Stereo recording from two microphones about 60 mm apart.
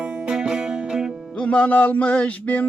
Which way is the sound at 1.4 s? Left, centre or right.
Left.